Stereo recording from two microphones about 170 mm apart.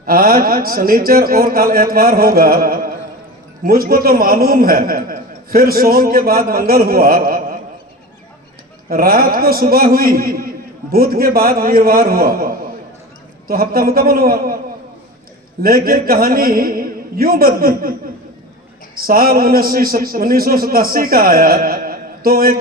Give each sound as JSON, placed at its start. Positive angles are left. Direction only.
{"t": 0.0, "sound": "a man's voice", "side_deg": -60}
{"t": 8.9, "sound": "a man's voice", "side_deg": -60}
{"t": 15.6, "sound": "a man's voice", "side_deg": -60}
{"t": 18.9, "sound": "a man's voice", "side_deg": -60}